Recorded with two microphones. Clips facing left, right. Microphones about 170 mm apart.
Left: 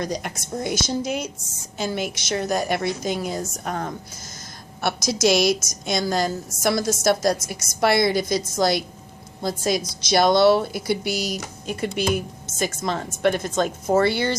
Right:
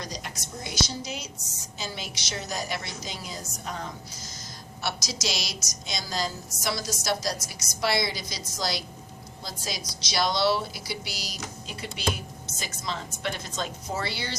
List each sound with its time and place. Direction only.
0.0 s a woman's voice: 55° left (ahead or behind)